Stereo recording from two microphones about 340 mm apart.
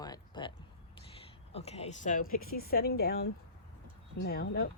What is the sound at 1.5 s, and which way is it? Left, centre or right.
A woman's voice, centre.